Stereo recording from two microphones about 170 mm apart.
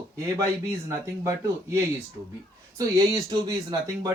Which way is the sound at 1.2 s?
15° right (ahead or behind).